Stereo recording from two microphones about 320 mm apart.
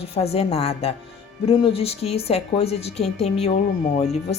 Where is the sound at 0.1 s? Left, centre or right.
Centre.